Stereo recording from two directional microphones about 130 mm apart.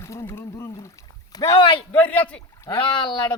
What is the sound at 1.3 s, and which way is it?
Speech, 35° left (ahead or behind).